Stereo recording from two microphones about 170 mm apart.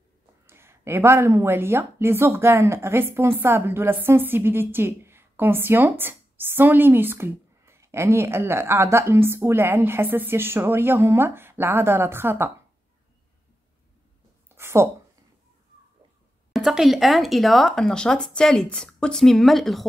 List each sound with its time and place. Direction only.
0.5 s a woman's voice: 15° right (ahead or behind)
14.5 s a sound: 15° right (ahead or behind)
16.5 s speech: centre (ahead or behind)